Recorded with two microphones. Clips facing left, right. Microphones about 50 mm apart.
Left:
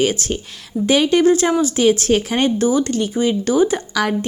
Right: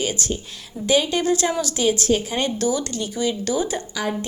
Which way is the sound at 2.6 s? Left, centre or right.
Left.